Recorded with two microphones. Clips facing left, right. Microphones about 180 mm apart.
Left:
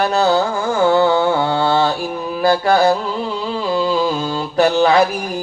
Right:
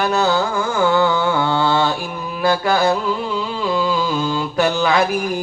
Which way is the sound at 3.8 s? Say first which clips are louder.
Left 3 dB; 40° left (ahead or behind).